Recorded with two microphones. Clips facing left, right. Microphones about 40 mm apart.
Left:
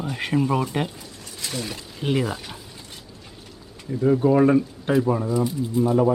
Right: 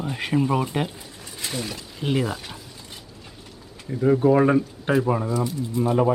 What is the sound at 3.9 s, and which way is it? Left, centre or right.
Speech, centre.